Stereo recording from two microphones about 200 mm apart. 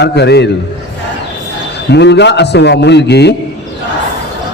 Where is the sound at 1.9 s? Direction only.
60° left (ahead or behind).